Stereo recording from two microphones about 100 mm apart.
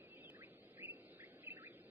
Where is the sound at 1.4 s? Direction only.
20° right (ahead or behind).